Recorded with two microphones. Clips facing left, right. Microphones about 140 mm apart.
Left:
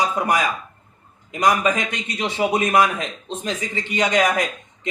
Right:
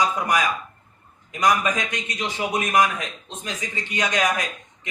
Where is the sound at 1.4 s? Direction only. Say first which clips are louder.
Left 2 dB; 60° left (ahead or behind).